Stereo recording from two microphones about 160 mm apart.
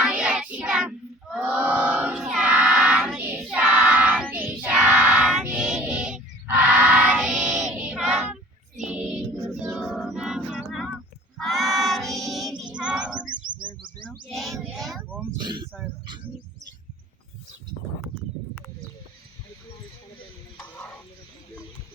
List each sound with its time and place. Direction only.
0.0 s child singing: 5° right (ahead or behind)
8.9 s music: 5° right (ahead or behind)
11.3 s child singing: centre (ahead or behind)
14.3 s child singing: centre (ahead or behind)
15.4 s a sound: 30° right (ahead or behind)